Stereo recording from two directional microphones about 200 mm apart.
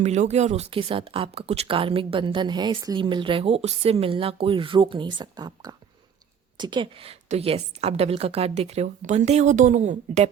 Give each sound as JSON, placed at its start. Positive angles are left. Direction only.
{"t": 0.0, "sound": "a woman's voice", "side_deg": -35}